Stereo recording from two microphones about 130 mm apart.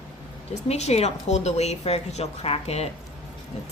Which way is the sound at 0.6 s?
55° left (ahead or behind).